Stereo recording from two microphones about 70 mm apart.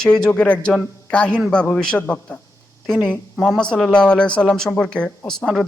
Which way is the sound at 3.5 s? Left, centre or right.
Centre.